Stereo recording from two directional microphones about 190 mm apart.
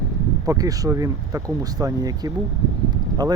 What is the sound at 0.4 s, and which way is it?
Speech, 20° right (ahead or behind).